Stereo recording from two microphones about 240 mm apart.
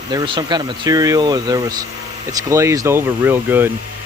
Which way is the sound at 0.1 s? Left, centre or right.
Centre.